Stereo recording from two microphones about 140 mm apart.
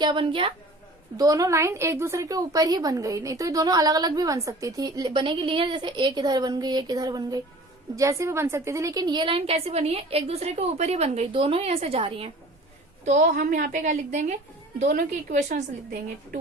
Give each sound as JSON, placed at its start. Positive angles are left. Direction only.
{"t": 0.0, "sound": "a woman's voice", "side_deg": -35}
{"t": 1.1, "sound": "a woman's voice", "side_deg": -25}
{"t": 13.1, "sound": "a woman's voice", "side_deg": -65}